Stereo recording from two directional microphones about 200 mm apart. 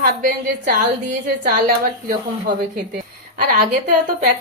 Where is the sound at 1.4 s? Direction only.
45° right (ahead or behind).